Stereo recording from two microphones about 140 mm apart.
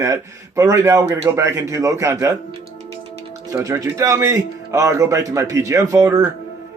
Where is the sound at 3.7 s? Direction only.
25° right (ahead or behind).